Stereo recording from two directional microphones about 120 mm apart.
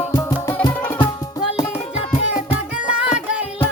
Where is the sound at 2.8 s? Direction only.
10° right (ahead or behind).